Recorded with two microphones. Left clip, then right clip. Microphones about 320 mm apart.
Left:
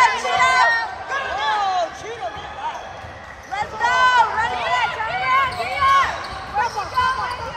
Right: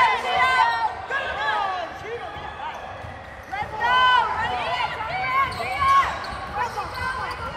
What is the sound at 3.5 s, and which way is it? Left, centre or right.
Run, centre.